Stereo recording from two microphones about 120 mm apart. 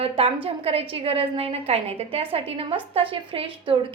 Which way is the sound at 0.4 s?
55° right (ahead or behind).